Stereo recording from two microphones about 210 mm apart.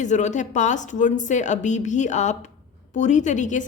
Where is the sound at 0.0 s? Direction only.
35° left (ahead or behind).